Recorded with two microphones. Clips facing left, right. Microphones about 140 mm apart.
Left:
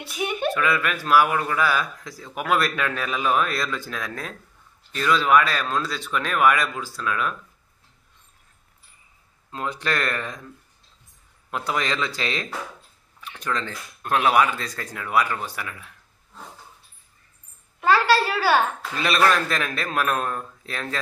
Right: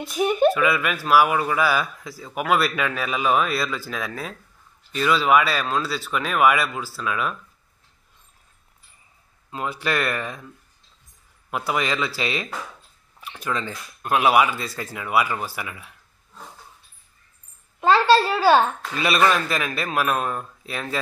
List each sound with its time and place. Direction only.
0.0 s speech: 40° right (ahead or behind)
0.5 s speech: 10° right (ahead or behind)
9.5 s speech: 10° right (ahead or behind)
11.5 s speech: 10° right (ahead or behind)
17.7 s a woman's voice: 25° right (ahead or behind)
18.8 s speech: centre (ahead or behind)